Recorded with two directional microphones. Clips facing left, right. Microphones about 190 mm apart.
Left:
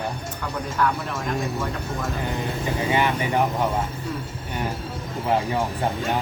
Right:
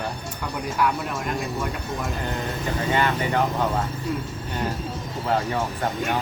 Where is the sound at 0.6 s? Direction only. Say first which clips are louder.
Even; 15° right (ahead or behind).